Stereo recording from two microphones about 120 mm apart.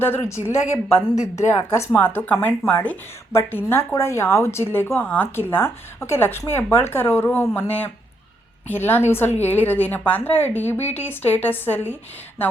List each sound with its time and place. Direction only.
0.0 s speech: 20° left (ahead or behind)